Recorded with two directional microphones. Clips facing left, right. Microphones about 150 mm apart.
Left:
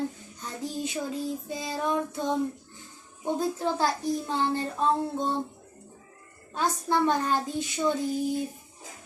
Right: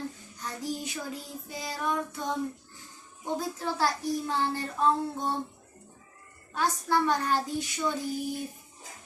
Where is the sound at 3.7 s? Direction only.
20° left (ahead or behind).